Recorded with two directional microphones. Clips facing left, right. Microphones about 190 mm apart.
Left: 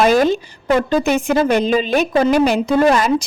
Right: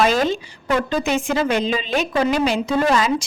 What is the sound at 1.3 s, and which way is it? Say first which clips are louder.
A woman's voice: left 5 dB; 50° left (ahead or behind).